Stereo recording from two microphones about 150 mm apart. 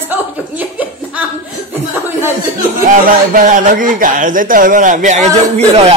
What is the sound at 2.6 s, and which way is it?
Speech, 60° right (ahead or behind).